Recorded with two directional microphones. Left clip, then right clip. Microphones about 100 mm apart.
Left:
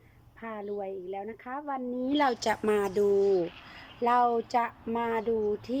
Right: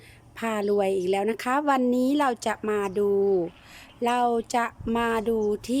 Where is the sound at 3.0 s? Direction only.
20° right (ahead or behind).